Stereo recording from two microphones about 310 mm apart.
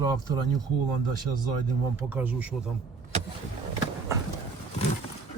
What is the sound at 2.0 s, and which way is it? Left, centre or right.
Speech, centre.